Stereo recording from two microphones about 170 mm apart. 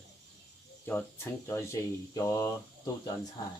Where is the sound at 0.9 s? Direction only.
15° left (ahead or behind).